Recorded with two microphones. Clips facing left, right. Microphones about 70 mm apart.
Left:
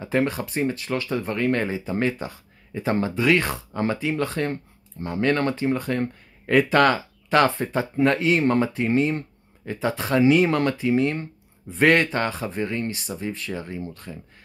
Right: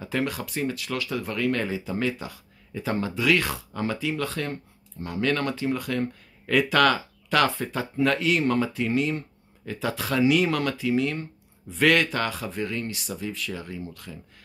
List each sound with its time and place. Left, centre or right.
0.0 s speech: left